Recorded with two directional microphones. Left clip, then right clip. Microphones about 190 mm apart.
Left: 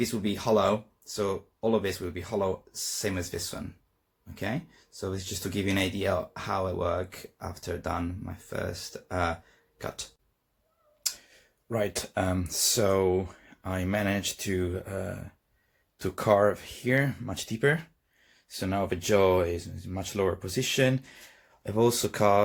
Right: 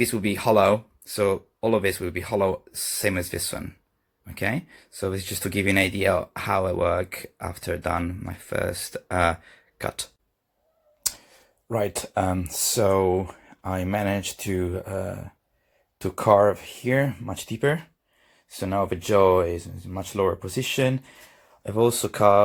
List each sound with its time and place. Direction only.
0.0 s speech: 40° right (ahead or behind)
9.7 s a sound: 40° right (ahead or behind)
11.7 s speech: 20° right (ahead or behind)